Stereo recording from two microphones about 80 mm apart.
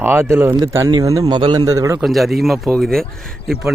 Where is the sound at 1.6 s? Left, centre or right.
Right.